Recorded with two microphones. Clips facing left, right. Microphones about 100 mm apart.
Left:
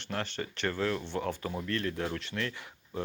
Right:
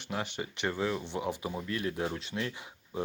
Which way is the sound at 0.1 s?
15° right (ahead or behind).